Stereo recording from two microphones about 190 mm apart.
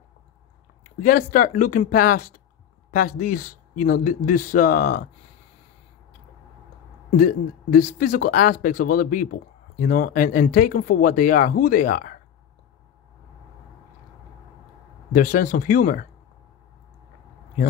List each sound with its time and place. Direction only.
0.8 s speech: 45° left (ahead or behind)
7.1 s speech: 50° left (ahead or behind)
15.1 s speech: 45° left (ahead or behind)